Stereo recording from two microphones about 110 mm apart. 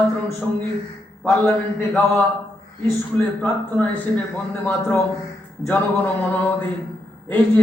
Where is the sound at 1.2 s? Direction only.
20° left (ahead or behind).